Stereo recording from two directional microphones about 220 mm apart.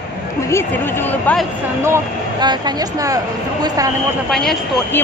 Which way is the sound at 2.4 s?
15° right (ahead or behind).